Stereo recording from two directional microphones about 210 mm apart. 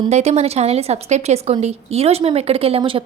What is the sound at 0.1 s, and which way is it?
A woman's voice, 30° right (ahead or behind).